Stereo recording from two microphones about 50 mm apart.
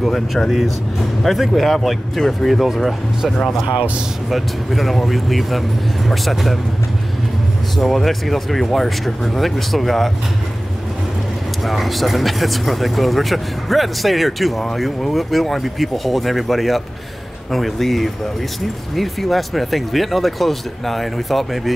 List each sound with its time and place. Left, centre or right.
0.0 s speech: centre
3.6 s speech: right
4.3 s speech: centre
7.7 s speech: centre
11.6 s speech: centre